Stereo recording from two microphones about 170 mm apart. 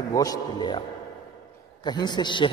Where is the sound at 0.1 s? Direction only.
20° left (ahead or behind).